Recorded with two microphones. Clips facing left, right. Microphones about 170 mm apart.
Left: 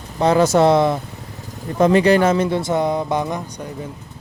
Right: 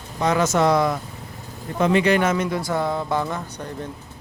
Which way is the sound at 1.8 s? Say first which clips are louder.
Left 5 dB; 40° left (ahead or behind).